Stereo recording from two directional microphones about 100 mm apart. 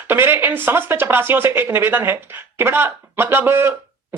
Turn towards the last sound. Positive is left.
turn(degrees=-25)  # may be behind; listen again after turning